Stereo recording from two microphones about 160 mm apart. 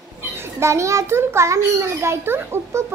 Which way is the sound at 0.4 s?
15° right (ahead or behind).